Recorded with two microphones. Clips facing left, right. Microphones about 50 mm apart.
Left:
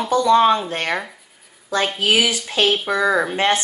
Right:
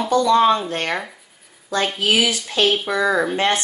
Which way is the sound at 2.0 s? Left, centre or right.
Left.